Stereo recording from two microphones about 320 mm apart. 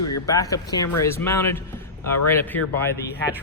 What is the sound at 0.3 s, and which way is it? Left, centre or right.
Speech, centre.